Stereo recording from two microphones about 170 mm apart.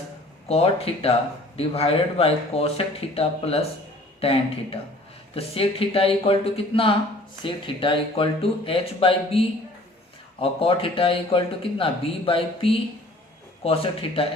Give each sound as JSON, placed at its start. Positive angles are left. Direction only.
{"t": 0.4, "sound": "a man's voice", "side_deg": 35}
{"t": 10.4, "sound": "a man's voice", "side_deg": 35}